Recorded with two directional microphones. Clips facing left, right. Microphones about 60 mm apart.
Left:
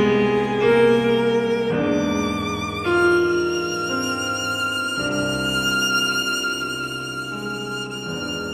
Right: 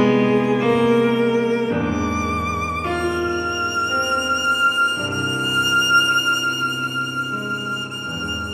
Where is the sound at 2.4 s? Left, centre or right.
Right.